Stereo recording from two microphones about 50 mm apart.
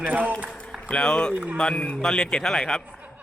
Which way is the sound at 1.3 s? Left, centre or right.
Right.